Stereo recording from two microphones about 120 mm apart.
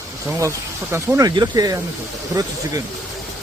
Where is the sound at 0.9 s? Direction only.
25° right (ahead or behind).